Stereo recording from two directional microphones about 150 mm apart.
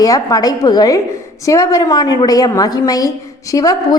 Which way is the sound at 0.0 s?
25° left (ahead or behind).